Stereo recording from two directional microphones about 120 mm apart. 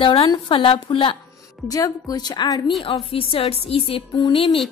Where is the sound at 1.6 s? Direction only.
30° left (ahead or behind).